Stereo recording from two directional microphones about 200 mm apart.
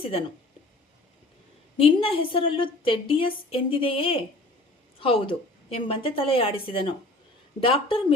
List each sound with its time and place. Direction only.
0.0 s a woman's voice: 30° left (ahead or behind)
1.8 s a woman's voice: 25° left (ahead or behind)